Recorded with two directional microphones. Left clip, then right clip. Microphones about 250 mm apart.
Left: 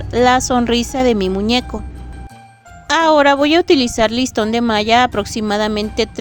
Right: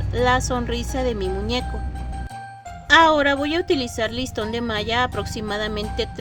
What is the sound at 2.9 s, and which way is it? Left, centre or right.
Speech, left.